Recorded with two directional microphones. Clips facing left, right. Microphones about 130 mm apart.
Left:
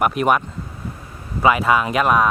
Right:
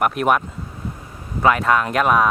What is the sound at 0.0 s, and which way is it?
Speech, centre (ahead or behind).